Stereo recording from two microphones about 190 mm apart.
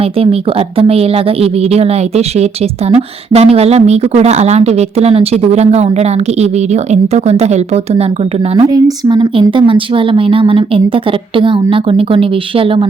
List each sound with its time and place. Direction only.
0.0 s a woman's voice: 30° right (ahead or behind)
8.5 s a woman's voice: 20° right (ahead or behind)